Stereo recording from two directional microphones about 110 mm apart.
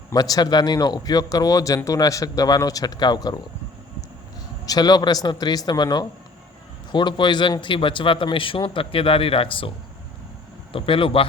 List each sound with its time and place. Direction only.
0.1 s a man's voice: 35° left (ahead or behind)
4.6 s a man's voice: 35° left (ahead or behind); by 11.3 s 55° left (ahead or behind)